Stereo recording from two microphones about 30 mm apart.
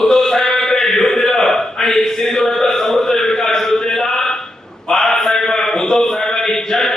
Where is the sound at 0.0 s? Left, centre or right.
Centre.